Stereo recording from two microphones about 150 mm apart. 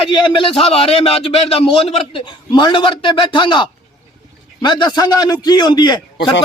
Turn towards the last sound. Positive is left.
turn(degrees=30)  # may be behind; listen again after turning